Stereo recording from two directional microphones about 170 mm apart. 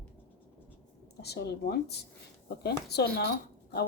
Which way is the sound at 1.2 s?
70° left (ahead or behind).